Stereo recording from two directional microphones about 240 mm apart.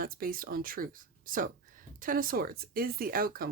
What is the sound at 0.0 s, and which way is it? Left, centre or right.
Speech, right.